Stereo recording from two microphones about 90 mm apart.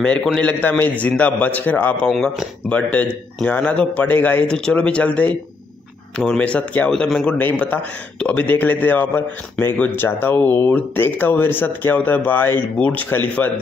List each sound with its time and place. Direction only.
0.4 s a man's voice: 15° left (ahead or behind)
2.0 s a man's voice: 10° left (ahead or behind)
7.3 s speech: 20° left (ahead or behind)